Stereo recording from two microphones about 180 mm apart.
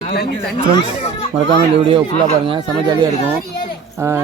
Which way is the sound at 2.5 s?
25° right (ahead or behind).